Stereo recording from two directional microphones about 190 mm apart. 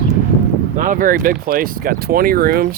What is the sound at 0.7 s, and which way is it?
Speech, 45° right (ahead or behind).